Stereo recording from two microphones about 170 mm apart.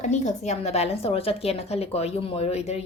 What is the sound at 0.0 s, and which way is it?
Speech, 45° left (ahead or behind).